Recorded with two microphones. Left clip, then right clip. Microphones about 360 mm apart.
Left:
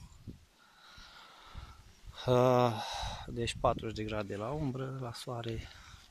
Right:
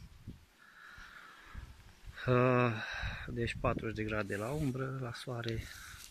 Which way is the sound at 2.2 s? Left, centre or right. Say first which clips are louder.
Left 3 dB; centre.